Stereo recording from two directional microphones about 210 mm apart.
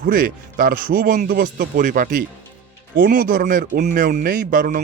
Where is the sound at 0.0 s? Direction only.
40° right (ahead or behind).